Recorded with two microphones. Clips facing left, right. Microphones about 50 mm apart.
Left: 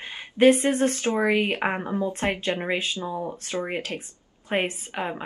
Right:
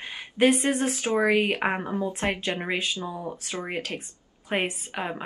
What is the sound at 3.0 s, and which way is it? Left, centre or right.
Speech, left.